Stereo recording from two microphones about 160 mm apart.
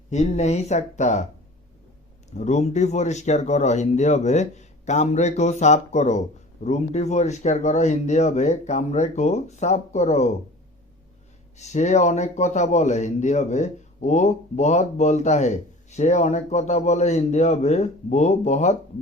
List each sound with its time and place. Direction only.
0.1 s speech: 45° left (ahead or behind)
2.3 s speech: 45° left (ahead or behind)
11.5 s speech: 45° left (ahead or behind)